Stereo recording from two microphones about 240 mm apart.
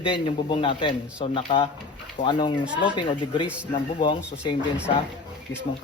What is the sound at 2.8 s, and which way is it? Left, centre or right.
A man's voice, centre.